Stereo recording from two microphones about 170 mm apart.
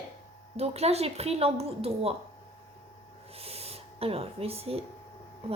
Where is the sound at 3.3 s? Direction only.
35° right (ahead or behind).